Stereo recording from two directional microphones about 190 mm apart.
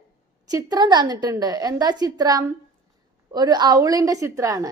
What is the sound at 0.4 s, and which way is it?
A woman's voice, 20° right (ahead or behind).